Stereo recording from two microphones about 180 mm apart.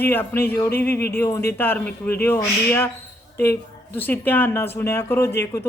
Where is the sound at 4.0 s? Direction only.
10° left (ahead or behind).